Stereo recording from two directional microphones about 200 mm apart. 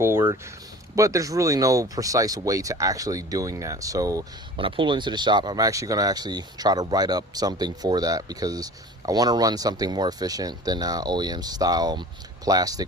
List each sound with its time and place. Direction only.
0.0 s speech: 10° right (ahead or behind)